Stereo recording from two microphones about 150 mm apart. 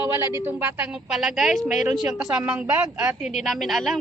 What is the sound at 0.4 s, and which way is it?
Speech, 15° right (ahead or behind).